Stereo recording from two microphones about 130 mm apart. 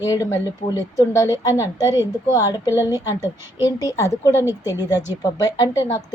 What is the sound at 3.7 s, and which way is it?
Speech, 25° left (ahead or behind).